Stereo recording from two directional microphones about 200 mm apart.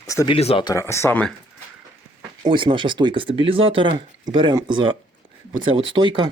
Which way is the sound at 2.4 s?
25° right (ahead or behind).